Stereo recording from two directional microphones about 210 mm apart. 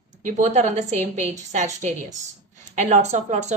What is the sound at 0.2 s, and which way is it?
A woman's voice, 35° right (ahead or behind).